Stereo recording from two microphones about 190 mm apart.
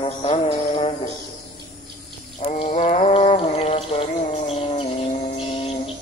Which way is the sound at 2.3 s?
35° left (ahead or behind).